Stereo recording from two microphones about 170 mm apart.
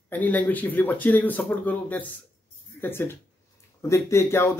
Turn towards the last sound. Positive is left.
turn(degrees=15)  # may be behind; listen again after turning